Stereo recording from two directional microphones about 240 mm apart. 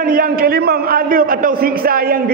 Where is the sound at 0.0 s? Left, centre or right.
Right.